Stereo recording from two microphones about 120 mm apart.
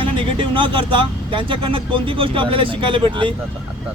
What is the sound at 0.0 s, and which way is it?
Speech, 45° right (ahead or behind).